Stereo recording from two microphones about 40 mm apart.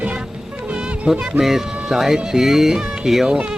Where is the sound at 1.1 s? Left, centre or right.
Centre.